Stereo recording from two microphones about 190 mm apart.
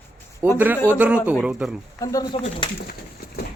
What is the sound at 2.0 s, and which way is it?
Speech, 20° left (ahead or behind).